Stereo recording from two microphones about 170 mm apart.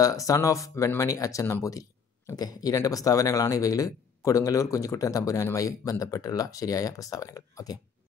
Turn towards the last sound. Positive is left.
turn(degrees=20)  # may be behind; listen again after turning